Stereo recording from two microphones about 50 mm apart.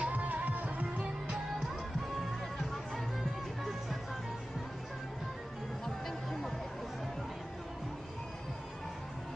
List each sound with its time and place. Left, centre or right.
0.0 s music: right
5.9 s music: centre